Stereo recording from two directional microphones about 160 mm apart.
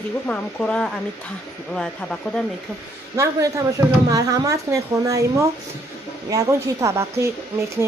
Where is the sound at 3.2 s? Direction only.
20° right (ahead or behind).